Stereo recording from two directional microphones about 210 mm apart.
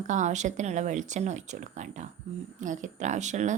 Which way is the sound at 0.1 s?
35° right (ahead or behind).